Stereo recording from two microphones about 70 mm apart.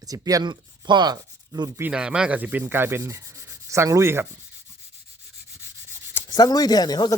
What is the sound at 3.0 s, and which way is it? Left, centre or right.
Rub, right.